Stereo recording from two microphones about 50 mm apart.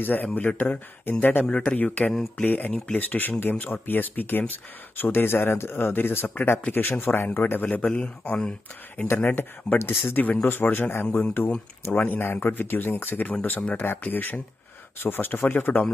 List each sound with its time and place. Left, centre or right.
0.0 s a man's voice: left
2.0 s speech: centre
2.4 s speech: left
7.7 s a man's voice: left
9.8 s speech: left
10.2 s speech: left
10.5 s speech: left
13.3 s speech: left